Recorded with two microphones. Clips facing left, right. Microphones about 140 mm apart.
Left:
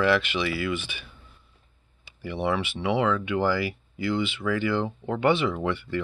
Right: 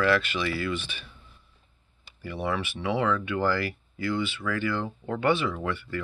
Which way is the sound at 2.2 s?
15° left (ahead or behind).